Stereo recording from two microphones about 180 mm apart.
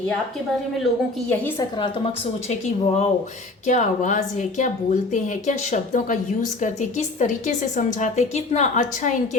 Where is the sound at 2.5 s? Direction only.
40° left (ahead or behind).